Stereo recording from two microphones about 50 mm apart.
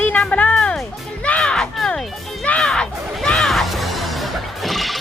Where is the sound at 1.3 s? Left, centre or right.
Centre.